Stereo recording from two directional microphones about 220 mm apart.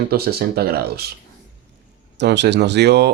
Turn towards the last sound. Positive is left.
turn(degrees=-50)  # may be behind; listen again after turning